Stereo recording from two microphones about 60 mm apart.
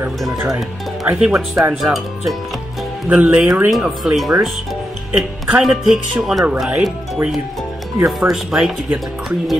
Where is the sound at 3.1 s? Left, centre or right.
Centre.